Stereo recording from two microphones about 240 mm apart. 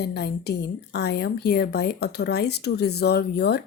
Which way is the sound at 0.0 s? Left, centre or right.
Left.